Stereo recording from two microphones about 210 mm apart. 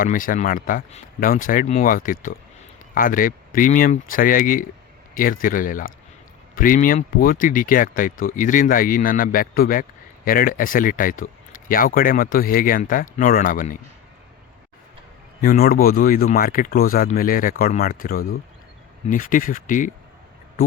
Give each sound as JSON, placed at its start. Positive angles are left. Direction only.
{"t": 0.0, "sound": "speech", "side_deg": 40}
{"t": 15.4, "sound": "speech", "side_deg": 45}